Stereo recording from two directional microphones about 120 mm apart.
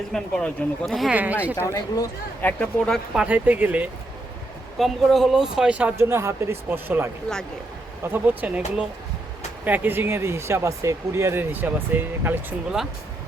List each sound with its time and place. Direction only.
0.1 s speech: 5° left (ahead or behind)
1.1 s speech: 15° right (ahead or behind)
1.5 s speech: 25° left (ahead or behind)
2.4 s speech: 15° left (ahead or behind)
3.2 s speech: 15° right (ahead or behind)
4.8 s speech: centre (ahead or behind)
9.6 s speech: 15° right (ahead or behind)